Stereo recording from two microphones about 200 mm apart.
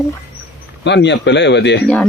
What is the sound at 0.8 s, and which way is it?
Speech, 60° left (ahead or behind).